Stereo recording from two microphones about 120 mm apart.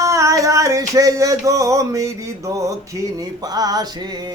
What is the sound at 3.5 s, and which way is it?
Music, 30° right (ahead or behind).